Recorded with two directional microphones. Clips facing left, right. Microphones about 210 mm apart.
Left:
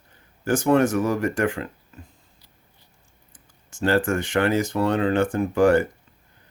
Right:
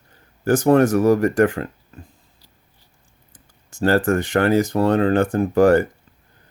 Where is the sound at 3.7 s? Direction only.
40° right (ahead or behind).